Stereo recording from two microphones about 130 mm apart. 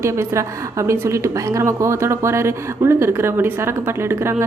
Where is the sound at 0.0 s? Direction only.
20° right (ahead or behind).